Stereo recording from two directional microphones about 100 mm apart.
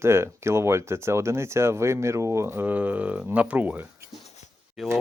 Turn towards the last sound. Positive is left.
turn(degrees=0)  # may be behind; listen again after turning